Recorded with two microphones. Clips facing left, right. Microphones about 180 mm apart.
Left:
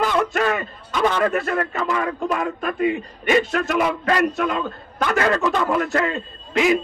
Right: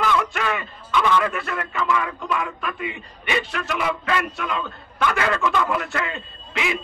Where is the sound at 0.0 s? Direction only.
40° left (ahead or behind).